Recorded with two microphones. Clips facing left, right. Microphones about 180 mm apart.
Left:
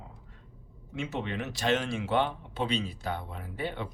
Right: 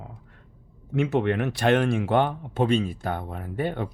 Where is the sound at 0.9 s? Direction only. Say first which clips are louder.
Right 11 dB; 60° right (ahead or behind).